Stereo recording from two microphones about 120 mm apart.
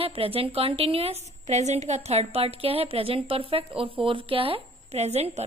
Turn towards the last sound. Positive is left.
turn(degrees=-65)  # may be behind; listen again after turning